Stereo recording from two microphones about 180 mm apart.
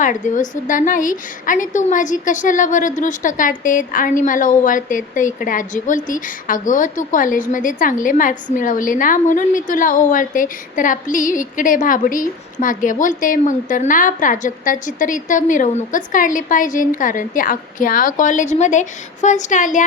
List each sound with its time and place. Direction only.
0.0 s a woman's voice: 45° left (ahead or behind)